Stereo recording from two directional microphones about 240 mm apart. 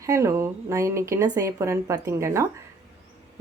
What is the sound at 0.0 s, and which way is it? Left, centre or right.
Speech, centre.